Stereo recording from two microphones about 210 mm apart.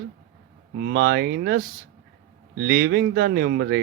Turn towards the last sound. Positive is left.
turn(degrees=-50)  # may be behind; listen again after turning